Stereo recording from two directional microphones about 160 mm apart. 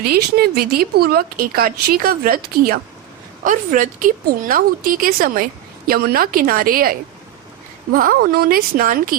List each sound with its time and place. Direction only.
0.0 s speech: 70° right (ahead or behind)
7.9 s speech: 60° right (ahead or behind)